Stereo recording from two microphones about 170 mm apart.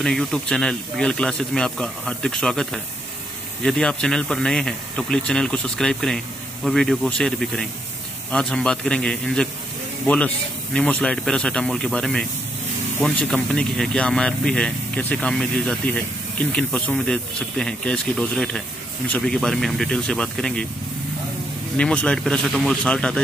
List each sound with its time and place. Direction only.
0.0 s speech: centre (ahead or behind)
21.7 s speech: 5° left (ahead or behind)